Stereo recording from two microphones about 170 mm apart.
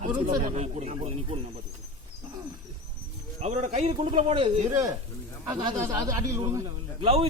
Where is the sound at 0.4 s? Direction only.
40° right (ahead or behind).